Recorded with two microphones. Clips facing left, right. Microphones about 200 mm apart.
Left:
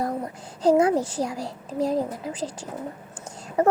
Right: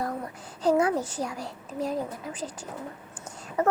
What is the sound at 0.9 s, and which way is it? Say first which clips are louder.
A child's voice: left 5 dB; 35° left (ahead or behind).